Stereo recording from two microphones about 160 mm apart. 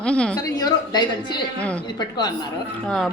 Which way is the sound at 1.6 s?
10° left (ahead or behind).